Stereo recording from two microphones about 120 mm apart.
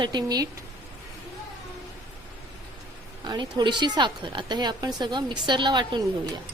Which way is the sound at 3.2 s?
35° right (ahead or behind).